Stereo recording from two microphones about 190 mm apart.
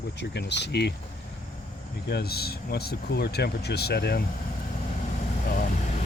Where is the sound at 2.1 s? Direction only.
55° left (ahead or behind).